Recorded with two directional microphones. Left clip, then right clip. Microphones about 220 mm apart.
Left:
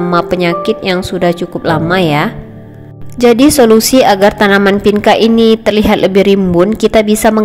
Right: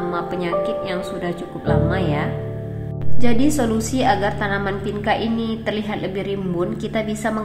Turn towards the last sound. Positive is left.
turn(degrees=45)  # may be behind; listen again after turning